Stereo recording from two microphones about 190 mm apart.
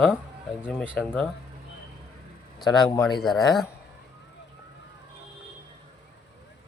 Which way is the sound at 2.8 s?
10° left (ahead or behind).